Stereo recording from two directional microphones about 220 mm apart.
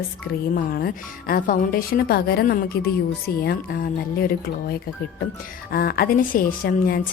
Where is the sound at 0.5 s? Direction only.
40° left (ahead or behind).